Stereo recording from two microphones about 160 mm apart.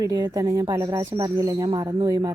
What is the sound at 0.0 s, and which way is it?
A woman's voice, 25° right (ahead or behind).